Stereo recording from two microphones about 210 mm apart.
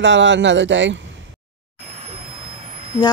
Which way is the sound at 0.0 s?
60° right (ahead or behind).